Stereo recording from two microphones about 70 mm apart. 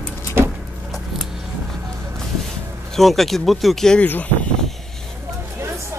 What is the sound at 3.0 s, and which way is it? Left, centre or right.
Speech, centre.